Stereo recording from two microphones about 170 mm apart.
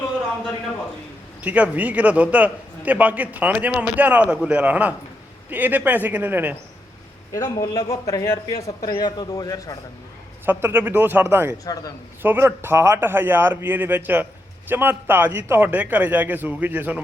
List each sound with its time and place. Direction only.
1.4 s a man's voice: 10° right (ahead or behind)
7.6 s speech: 20° left (ahead or behind)
10.4 s a man's voice: 10° right (ahead or behind)
11.6 s speech: 20° left (ahead or behind)
12.2 s a man's voice: 15° right (ahead or behind)